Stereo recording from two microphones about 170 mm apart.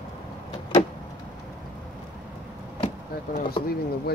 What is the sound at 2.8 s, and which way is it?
Vehicle, 45° left (ahead or behind).